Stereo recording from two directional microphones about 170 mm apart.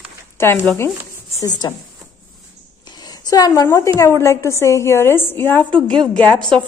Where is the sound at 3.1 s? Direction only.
20° left (ahead or behind).